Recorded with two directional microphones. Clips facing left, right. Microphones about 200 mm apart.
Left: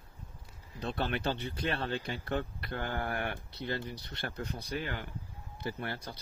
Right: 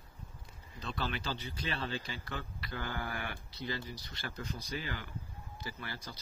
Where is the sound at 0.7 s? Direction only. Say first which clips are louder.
Left 5 dB; 60° left (ahead or behind).